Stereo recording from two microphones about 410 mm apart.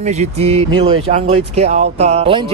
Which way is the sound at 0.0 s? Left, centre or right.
Centre.